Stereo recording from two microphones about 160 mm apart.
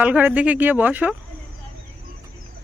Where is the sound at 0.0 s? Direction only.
10° right (ahead or behind).